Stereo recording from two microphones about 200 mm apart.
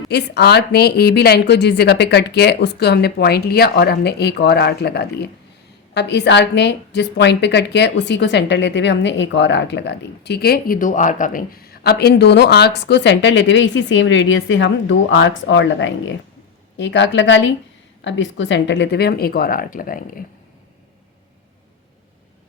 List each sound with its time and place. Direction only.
0.1 s a woman's voice: 55° left (ahead or behind)